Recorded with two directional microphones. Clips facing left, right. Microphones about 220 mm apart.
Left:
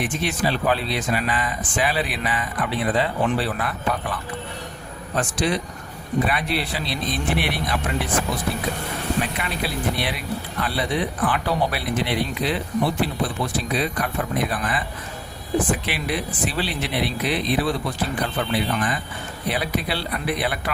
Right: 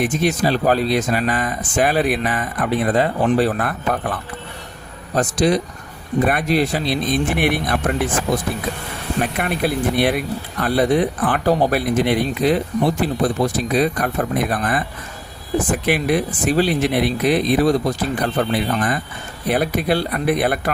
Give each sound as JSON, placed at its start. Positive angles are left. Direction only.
{"t": 0.0, "sound": "speech", "side_deg": -40}
{"t": 9.2, "sound": "speech", "side_deg": -50}